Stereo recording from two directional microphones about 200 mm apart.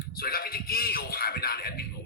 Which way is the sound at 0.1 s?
50° left (ahead or behind).